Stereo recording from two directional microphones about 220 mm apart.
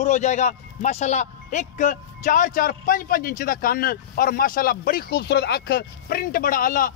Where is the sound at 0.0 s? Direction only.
35° left (ahead or behind).